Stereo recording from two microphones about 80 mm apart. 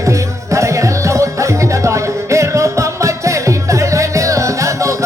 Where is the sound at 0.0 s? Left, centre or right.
Right.